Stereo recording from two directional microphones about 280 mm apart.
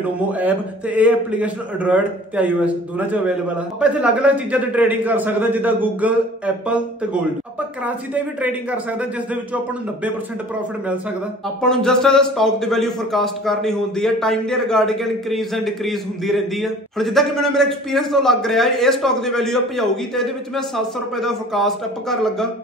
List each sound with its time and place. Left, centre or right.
0.3 s a man's voice: centre
7.8 s a man's voice: centre
11.6 s a man's voice: centre